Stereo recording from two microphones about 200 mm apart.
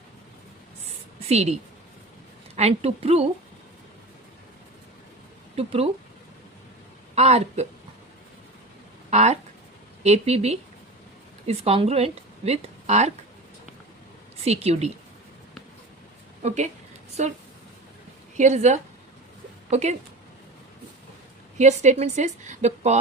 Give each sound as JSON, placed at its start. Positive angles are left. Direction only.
{"t": 1.3, "sound": "a woman's voice", "side_deg": -35}
{"t": 2.6, "sound": "a woman's voice", "side_deg": -30}
{"t": 5.5, "sound": "speech", "side_deg": -30}
{"t": 7.2, "sound": "a woman's voice", "side_deg": -30}
{"t": 9.0, "sound": "a woman's voice", "side_deg": -35}
{"t": 14.4, "sound": "a woman's voice", "side_deg": -30}
{"t": 16.4, "sound": "a woman's voice", "side_deg": -35}
{"t": 18.3, "sound": "a woman's voice", "side_deg": -35}
{"t": 21.6, "sound": "a woman's voice", "side_deg": -35}